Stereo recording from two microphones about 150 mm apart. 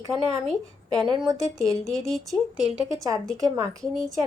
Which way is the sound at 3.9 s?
Centre (ahead or behind).